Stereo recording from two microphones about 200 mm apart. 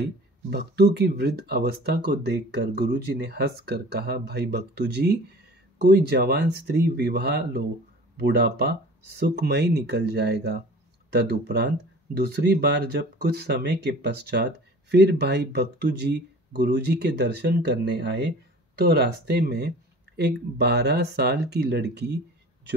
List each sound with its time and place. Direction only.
0.0 s speech: 55° right (ahead or behind)